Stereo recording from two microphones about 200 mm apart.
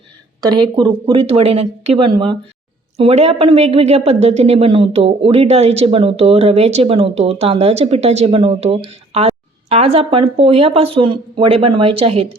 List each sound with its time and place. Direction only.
0.5 s a woman's voice: 25° right (ahead or behind)